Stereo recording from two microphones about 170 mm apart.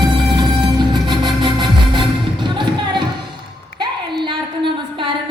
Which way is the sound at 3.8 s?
30° right (ahead or behind).